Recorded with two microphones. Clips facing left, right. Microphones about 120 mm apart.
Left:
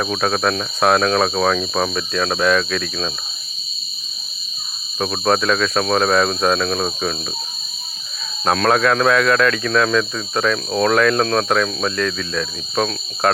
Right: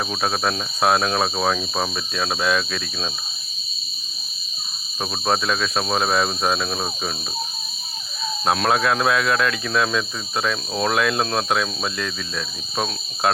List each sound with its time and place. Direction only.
0.1 s speech: 15° right (ahead or behind)
4.9 s speech: 15° right (ahead or behind)
8.4 s speech: 15° right (ahead or behind)